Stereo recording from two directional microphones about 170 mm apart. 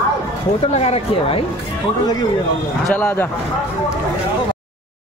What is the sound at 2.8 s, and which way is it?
Speech, 10° left (ahead or behind).